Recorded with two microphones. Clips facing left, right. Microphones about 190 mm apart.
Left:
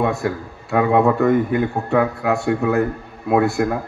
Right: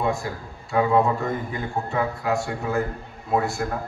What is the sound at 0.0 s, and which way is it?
A man's voice, 65° left (ahead or behind).